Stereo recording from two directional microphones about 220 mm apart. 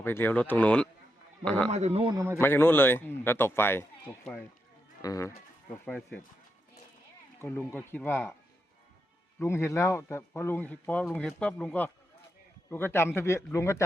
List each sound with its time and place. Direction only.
0.0 s a man's voice: 10° left (ahead or behind)
1.7 s a man's voice: 30° right (ahead or behind)
2.4 s speech: 10° left (ahead or behind)
5.0 s speech: 15° left (ahead or behind)
7.4 s speech: 10° left (ahead or behind)
9.4 s speech: 10° left (ahead or behind)